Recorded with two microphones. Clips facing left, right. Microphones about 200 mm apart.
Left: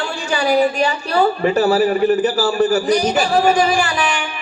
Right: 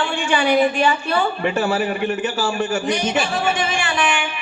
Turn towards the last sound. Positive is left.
turn(degrees=35)  # may be behind; listen again after turning